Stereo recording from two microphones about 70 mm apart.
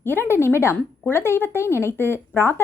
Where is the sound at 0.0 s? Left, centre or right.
Left.